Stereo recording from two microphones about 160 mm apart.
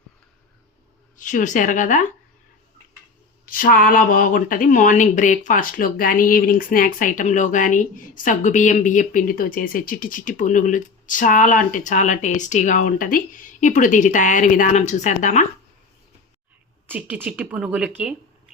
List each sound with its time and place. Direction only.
1.1 s speech: 55° left (ahead or behind)
3.4 s speech: 60° left (ahead or behind)
16.8 s speech: 10° right (ahead or behind)